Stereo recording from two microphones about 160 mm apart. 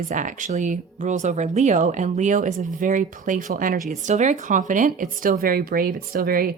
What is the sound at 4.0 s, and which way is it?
Speech, 50° right (ahead or behind).